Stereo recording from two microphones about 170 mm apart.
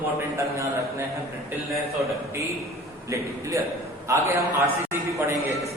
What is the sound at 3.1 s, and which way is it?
A man's voice, 20° right (ahead or behind).